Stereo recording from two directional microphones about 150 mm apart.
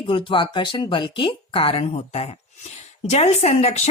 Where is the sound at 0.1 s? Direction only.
35° left (ahead or behind).